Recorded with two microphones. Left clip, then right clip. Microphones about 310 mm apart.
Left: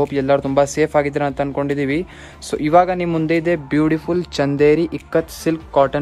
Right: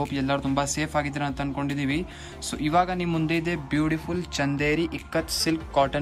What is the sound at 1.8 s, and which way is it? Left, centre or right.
Speech, centre.